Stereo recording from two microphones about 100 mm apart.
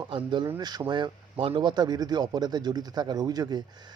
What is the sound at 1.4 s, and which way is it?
Speech, 55° right (ahead or behind).